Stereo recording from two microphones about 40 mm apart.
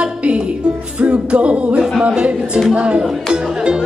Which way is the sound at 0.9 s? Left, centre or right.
Right.